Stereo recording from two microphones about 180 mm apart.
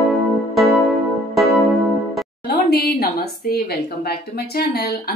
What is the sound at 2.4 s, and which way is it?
Speech, 60° left (ahead or behind).